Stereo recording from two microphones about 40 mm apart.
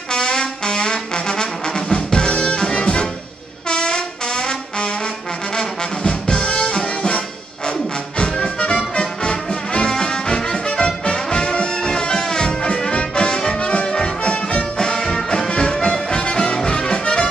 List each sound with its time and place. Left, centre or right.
0.1 s brass instrument: centre
8.2 s music: left
14.3 s music: left
14.8 s music: centre